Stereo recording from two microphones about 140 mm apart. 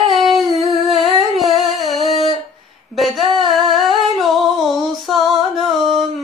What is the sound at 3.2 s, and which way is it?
Singing, 35° right (ahead or behind).